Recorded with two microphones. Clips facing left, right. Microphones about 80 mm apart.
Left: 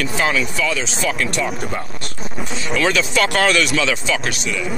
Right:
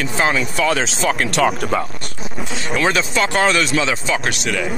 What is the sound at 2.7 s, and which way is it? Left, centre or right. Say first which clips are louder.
Speech: even; right.